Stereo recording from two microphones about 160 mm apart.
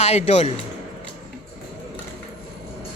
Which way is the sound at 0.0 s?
45° left (ahead or behind).